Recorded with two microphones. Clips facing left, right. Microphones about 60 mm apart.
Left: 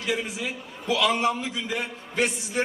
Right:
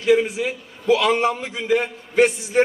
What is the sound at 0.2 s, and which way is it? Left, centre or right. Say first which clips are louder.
A man's voice: right 8 dB; right.